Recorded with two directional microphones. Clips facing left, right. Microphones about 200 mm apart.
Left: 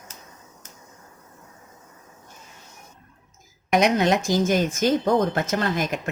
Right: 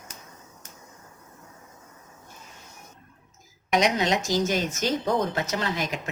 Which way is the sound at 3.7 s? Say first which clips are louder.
Left 4 dB; 55° left (ahead or behind).